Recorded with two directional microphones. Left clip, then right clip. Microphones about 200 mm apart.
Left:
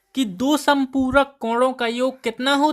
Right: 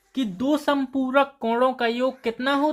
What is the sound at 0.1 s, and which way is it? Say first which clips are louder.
Speech: left 3 dB; 35° left (ahead or behind).